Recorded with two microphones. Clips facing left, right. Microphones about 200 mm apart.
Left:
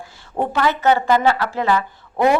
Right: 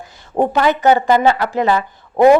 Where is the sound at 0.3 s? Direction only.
20° right (ahead or behind).